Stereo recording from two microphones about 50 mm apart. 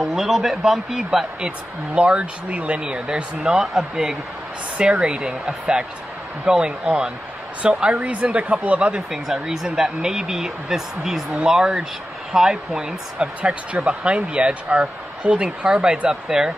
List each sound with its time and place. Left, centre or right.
0.0 s speech: centre
2.0 s speech: right; by 4.2 s centre
4.7 s speech: centre
6.4 s speech: centre
9.1 s speech: centre